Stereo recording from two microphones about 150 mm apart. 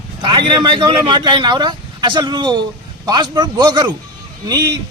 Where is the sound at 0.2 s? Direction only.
30° right (ahead or behind).